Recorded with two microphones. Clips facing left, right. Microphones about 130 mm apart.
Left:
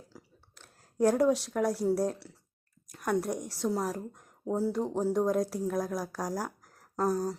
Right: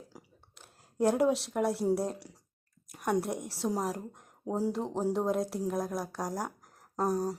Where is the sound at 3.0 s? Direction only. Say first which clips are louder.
Even; 5° right (ahead or behind).